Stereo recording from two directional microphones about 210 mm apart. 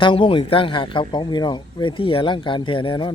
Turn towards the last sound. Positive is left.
turn(degrees=25)  # may be behind; listen again after turning